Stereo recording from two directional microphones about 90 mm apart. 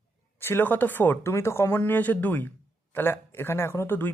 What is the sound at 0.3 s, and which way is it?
Speech, 25° left (ahead or behind).